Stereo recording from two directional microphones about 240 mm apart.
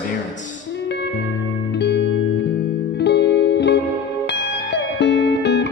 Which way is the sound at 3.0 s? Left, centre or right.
Left.